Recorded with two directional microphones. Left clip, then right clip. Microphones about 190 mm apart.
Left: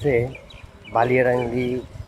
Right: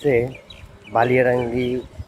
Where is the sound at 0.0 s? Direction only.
10° right (ahead or behind).